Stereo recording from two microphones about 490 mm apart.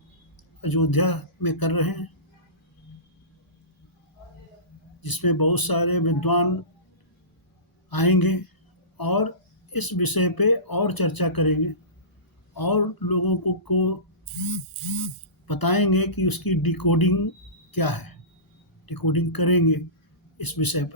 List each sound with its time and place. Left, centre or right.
0.6 s speech: left
5.0 s speech: left
7.9 s speech: left
15.4 s a woman's voice: left